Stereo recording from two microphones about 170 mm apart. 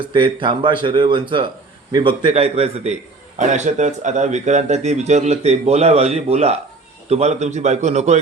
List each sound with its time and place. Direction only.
0.0 s a man's voice: 30° right (ahead or behind)